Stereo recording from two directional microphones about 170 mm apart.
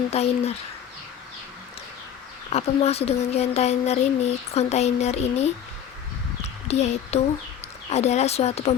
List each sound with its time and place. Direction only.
0.1 s speech: 35° left (ahead or behind)
2.5 s speech: 40° left (ahead or behind)
6.7 s speech: 40° left (ahead or behind)